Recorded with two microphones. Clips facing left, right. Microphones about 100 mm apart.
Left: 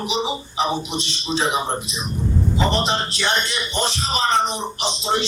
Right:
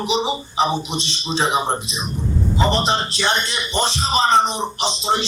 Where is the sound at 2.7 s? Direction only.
25° right (ahead or behind).